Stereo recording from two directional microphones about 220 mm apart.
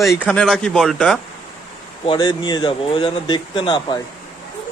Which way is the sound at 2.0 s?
20° left (ahead or behind).